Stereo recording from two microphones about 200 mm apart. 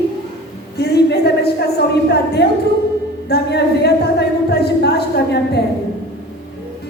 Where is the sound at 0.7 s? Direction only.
55° left (ahead or behind).